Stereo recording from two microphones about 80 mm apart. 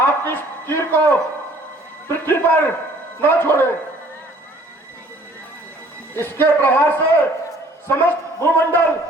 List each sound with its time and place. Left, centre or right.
0.0 s a man's voice: left
6.1 s a man's voice: left